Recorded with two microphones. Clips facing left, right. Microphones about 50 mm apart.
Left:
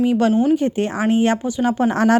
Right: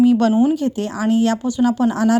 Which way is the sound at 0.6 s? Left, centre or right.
Left.